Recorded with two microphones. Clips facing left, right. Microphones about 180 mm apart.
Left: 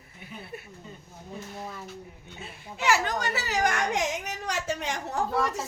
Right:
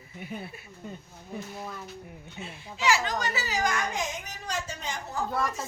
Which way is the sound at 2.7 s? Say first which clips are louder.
Left 1 dB; 55° left (ahead or behind).